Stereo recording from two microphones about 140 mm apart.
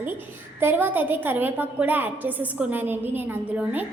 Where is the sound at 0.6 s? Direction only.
15° right (ahead or behind).